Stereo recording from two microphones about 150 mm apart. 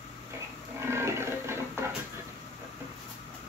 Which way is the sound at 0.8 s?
15° right (ahead or behind).